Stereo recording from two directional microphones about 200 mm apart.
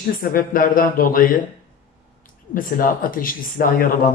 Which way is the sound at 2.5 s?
45° left (ahead or behind).